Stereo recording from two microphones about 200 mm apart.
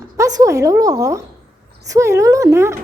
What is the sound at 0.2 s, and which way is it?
Speech, 15° right (ahead or behind).